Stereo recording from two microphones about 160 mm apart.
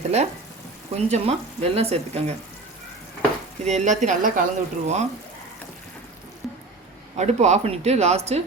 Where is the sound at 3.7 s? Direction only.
45° right (ahead or behind).